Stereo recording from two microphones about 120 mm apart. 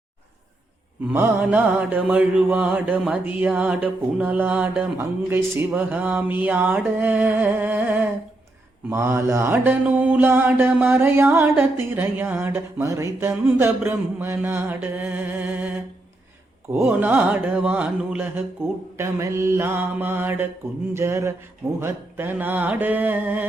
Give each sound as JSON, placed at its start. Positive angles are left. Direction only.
{"t": 1.1, "sound": "mantra", "side_deg": -15}
{"t": 16.8, "sound": "mantra", "side_deg": -10}
{"t": 20.9, "sound": "a sound", "side_deg": -25}
{"t": 21.8, "sound": "mantra", "side_deg": -20}